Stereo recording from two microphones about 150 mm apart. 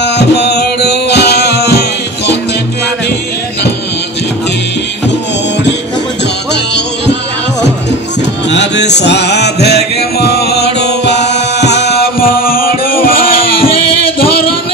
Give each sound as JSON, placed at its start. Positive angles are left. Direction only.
{"t": 0.4, "sound": "music", "side_deg": 90}
{"t": 9.3, "sound": "music", "side_deg": 90}
{"t": 11.9, "sound": "music", "side_deg": 80}